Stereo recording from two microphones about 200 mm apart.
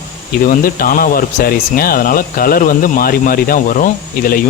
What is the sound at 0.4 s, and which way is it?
Speech, 45° left (ahead or behind).